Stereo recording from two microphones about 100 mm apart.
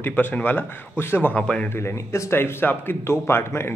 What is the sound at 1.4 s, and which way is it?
Speech, 10° left (ahead or behind).